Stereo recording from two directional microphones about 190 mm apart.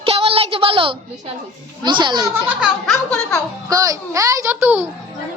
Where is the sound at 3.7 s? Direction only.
20° right (ahead or behind).